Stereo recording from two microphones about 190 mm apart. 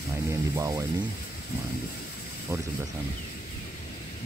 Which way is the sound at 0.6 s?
15° right (ahead or behind).